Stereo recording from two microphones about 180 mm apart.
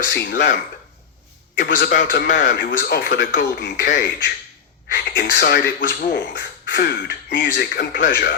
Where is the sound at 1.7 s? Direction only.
65° left (ahead or behind).